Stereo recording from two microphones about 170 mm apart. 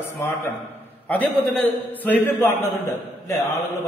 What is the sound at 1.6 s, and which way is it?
Speech, 10° left (ahead or behind).